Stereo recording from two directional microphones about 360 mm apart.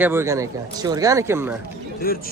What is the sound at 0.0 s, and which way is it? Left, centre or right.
Speech, centre.